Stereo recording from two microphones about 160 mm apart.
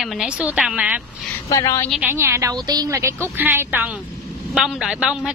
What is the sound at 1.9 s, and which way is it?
Speech, 10° right (ahead or behind).